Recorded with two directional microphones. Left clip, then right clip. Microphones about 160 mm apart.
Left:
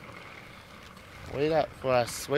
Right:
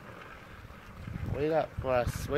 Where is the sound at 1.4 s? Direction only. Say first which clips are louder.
Left 3 dB; 65° left (ahead or behind).